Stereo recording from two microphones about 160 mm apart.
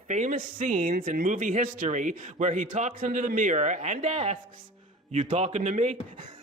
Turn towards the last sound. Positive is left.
turn(degrees=-45)  # may be behind; listen again after turning